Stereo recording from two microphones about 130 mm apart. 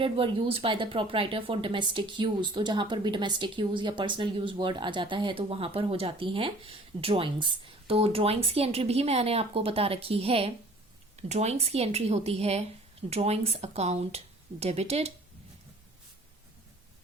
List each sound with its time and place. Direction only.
0.0 s speech: 45° right (ahead or behind)
11.2 s speech: 60° right (ahead or behind)